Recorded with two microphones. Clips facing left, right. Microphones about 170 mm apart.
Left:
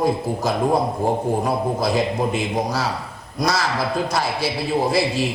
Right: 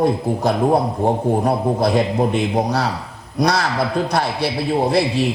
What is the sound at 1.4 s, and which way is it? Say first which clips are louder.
A man's voice: right 4 dB; 60° right (ahead or behind).